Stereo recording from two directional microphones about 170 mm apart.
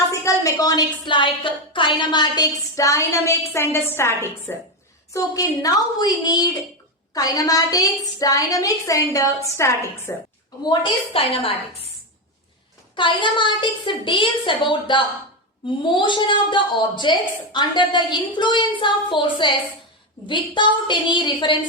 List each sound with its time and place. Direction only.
0.1 s a woman's voice: 20° left (ahead or behind)
10.7 s a woman's voice: 30° left (ahead or behind)
13.0 s a woman's voice: 30° left (ahead or behind)